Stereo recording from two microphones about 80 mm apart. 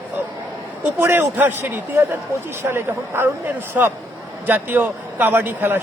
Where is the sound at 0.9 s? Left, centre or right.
Right.